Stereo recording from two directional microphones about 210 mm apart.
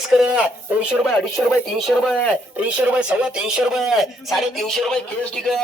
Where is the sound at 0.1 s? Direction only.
5° right (ahead or behind).